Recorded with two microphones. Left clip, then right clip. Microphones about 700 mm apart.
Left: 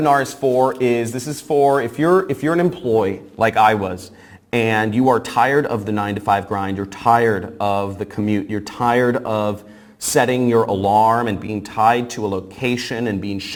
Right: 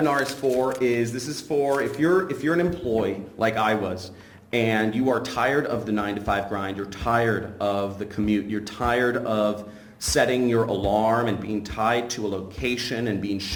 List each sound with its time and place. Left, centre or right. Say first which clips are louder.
0.6 s speech: left 6 dB; left